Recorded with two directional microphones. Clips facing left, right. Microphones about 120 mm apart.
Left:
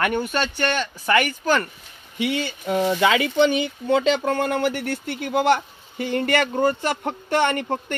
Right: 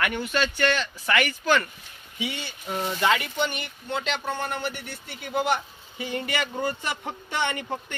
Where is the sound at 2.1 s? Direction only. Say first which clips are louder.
Left 9 dB; 85° left.